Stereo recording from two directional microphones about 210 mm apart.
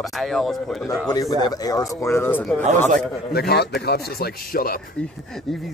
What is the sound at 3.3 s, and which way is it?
A man's voice, 50° left (ahead or behind).